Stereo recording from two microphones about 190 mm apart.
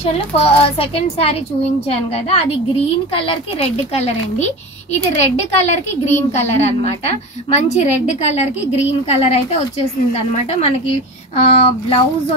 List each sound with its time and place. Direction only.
0.0 s a woman's voice: 30° left (ahead or behind)